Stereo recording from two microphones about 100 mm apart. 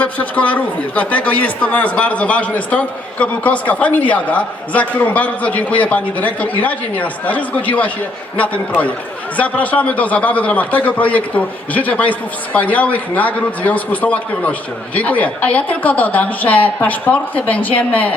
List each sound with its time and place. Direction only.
0.0 s a man's voice: 15° left (ahead or behind)
9.4 s a man's voice: 15° left (ahead or behind)